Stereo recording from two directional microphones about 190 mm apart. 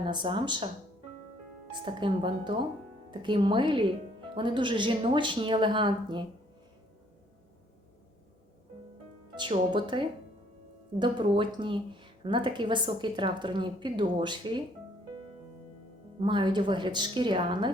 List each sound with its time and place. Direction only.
0.0 s speech: 25° right (ahead or behind)
1.7 s speech: 25° right (ahead or behind)
9.3 s speech: 25° right (ahead or behind)
16.2 s speech: 25° right (ahead or behind)